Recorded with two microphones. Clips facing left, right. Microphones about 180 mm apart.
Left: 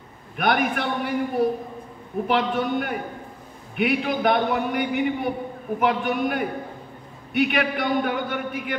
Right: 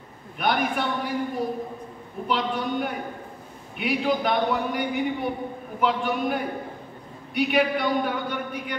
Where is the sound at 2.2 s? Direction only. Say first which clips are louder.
Left 3 dB; 60° left (ahead or behind).